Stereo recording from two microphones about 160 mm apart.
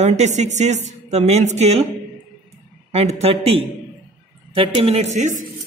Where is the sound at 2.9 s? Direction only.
40° right (ahead or behind).